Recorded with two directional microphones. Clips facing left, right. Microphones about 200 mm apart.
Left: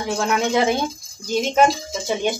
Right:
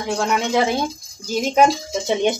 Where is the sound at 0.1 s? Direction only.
Centre (ahead or behind).